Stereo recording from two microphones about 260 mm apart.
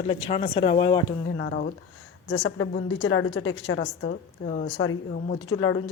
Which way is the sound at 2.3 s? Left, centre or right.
Left.